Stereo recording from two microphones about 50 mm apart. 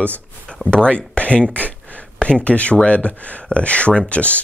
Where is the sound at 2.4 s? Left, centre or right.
Left.